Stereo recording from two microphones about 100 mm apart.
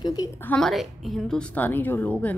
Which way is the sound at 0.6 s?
Centre (ahead or behind).